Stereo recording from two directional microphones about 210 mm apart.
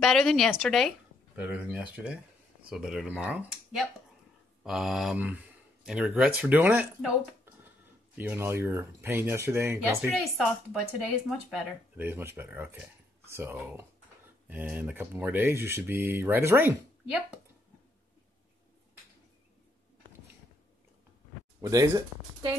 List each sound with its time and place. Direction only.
0.0 s speech: centre (ahead or behind)
8.2 s speech: 10° right (ahead or behind)
10.0 s speech: centre (ahead or behind)
21.5 s speech: 15° right (ahead or behind)